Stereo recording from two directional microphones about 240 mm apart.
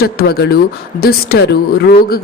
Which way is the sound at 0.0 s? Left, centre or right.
Left.